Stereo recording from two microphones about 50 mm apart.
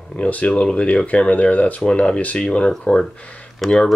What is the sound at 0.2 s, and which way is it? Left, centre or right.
Speech, left.